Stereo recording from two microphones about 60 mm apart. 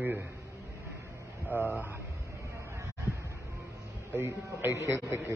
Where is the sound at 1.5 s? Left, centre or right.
Right.